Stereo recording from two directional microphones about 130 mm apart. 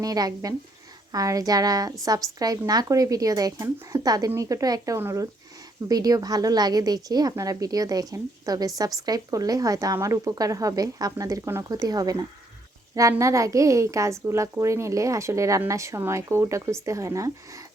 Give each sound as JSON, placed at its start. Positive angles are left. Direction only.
{"t": 0.0, "sound": "speech", "side_deg": -30}